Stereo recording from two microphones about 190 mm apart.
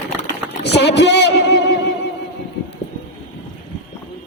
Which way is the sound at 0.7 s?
65° left (ahead or behind).